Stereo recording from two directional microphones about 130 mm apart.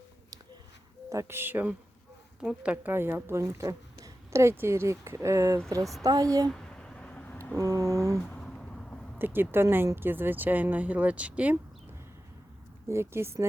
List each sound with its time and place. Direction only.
1.1 s speech: 20° right (ahead or behind)
6.5 s a sound: 5° left (ahead or behind)
7.5 s speech: 25° right (ahead or behind)
8.2 s a sound: 5° left (ahead or behind)
9.1 s speech: 15° right (ahead or behind)
12.9 s speech: 20° right (ahead or behind)